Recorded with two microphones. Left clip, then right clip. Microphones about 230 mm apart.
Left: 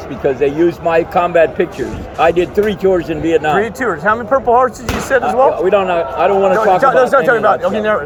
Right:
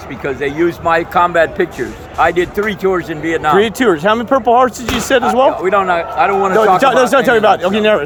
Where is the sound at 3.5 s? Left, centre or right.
Right.